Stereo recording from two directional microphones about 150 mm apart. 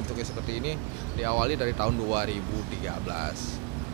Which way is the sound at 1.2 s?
25° right (ahead or behind).